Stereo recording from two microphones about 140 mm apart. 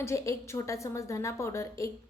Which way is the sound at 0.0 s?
20° left (ahead or behind).